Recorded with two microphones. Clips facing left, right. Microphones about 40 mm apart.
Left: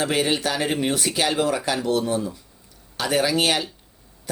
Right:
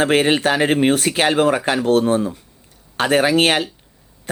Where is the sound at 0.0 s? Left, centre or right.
Right.